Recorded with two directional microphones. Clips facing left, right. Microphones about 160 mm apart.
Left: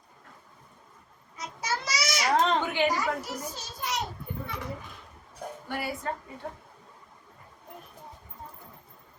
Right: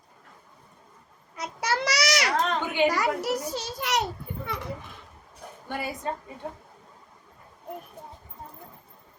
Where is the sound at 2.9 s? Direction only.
75° right (ahead or behind).